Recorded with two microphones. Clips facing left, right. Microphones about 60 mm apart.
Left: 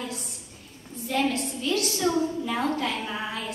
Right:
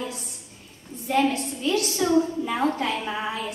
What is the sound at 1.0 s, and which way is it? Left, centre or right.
A woman's voice, right.